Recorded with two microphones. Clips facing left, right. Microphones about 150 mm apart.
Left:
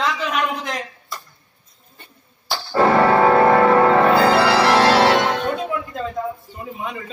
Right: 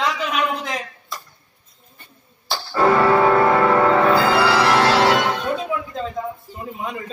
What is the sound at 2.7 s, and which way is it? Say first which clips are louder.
Music: left 1 dB; 35° left (ahead or behind).